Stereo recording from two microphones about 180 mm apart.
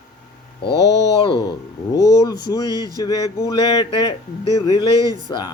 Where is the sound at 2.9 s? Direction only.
20° left (ahead or behind).